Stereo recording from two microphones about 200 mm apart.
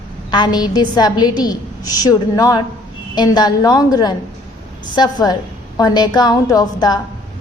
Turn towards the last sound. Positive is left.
turn(degrees=20)  # may be behind; listen again after turning